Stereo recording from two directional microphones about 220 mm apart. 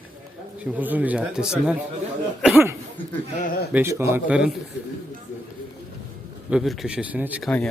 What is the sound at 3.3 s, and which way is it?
Speech, 40° left (ahead or behind).